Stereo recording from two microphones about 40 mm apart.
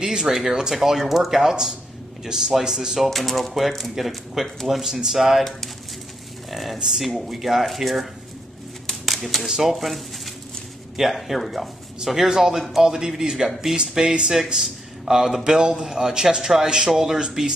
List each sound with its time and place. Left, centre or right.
0.0 s speech: centre
3.0 s speech: centre
9.0 s a sound: centre
9.5 s speech: centre
13.7 s speech: right
14.5 s speech: centre